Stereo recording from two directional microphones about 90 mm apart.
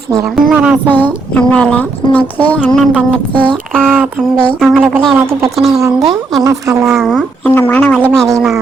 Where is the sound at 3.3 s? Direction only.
65° right (ahead or behind).